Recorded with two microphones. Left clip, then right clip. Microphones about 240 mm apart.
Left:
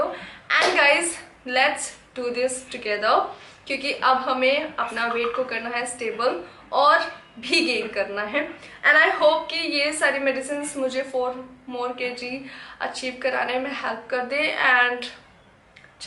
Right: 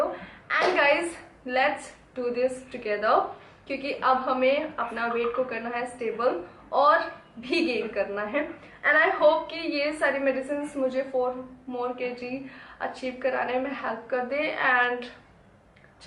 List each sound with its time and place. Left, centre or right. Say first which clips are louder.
0.0 s a woman's voice: left 2 dB; centre
11.1 s speech: left 1 dB; right
11.7 s a woman's voice: left 3 dB; centre